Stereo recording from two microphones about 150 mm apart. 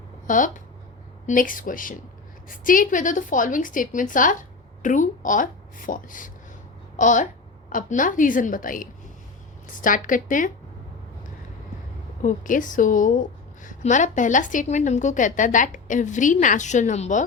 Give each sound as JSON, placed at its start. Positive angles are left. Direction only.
{"t": 0.3, "sound": "a woman's voice", "side_deg": 60}
{"t": 12.2, "sound": "a woman's voice", "side_deg": 60}